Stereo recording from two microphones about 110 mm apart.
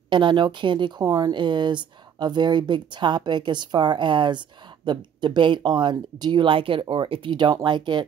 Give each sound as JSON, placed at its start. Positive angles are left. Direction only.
{"t": 0.1, "sound": "speech", "side_deg": -45}